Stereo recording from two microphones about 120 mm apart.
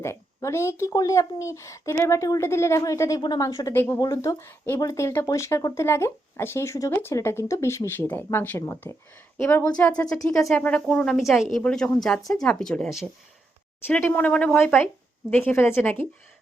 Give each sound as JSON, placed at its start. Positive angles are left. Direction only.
{"t": 0.0, "sound": "speech", "side_deg": 20}
{"t": 10.5, "sound": "a woman's voice", "side_deg": 10}
{"t": 13.8, "sound": "speech", "side_deg": 15}